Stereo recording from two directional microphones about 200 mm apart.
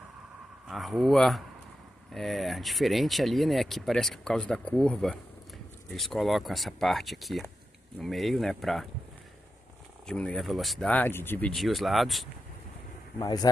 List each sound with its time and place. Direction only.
0.7 s speech: centre (ahead or behind)
10.0 s speech: 5° left (ahead or behind)
13.2 s speech: 20° left (ahead or behind)